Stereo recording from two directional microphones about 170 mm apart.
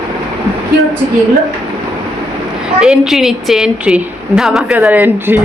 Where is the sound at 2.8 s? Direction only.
Centre (ahead or behind).